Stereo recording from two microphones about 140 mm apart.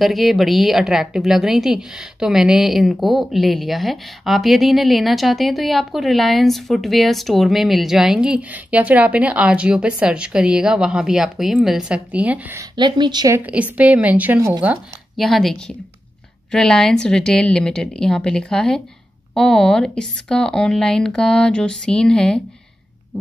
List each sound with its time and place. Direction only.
0.0 s a woman's voice: centre (ahead or behind)
12.7 s speech: 30° right (ahead or behind)
13.3 s a woman's voice: 10° right (ahead or behind)
15.1 s a woman's voice: centre (ahead or behind)